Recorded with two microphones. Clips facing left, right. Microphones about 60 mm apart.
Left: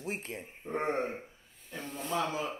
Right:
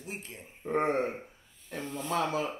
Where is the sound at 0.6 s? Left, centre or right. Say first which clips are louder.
Right 5 dB; right.